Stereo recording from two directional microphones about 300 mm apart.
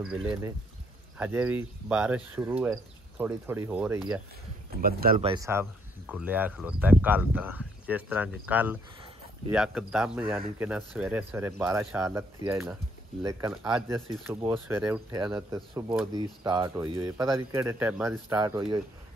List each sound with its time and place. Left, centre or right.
0.0 s speech: centre
4.8 s speech: right
5.2 s speech: centre